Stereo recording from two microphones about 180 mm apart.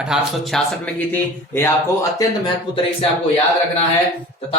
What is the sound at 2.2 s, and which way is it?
Speech, 25° left (ahead or behind).